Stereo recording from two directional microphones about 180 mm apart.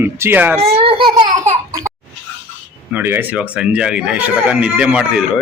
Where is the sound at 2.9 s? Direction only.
10° right (ahead or behind).